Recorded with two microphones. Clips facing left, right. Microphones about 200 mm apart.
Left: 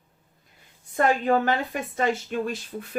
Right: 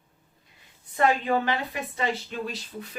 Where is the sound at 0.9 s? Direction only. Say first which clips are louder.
Left 2 dB; 50° left (ahead or behind).